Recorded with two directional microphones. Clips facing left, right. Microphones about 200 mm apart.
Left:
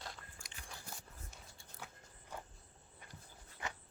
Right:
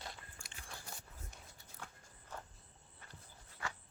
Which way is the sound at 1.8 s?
10° left (ahead or behind).